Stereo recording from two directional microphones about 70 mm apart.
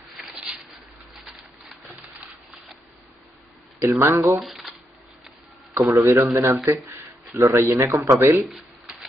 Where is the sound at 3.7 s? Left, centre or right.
Right.